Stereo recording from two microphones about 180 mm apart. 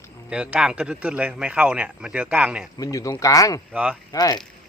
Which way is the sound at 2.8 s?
20° left (ahead or behind).